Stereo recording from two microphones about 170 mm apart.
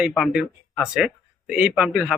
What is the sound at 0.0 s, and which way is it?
A man's voice, centre (ahead or behind).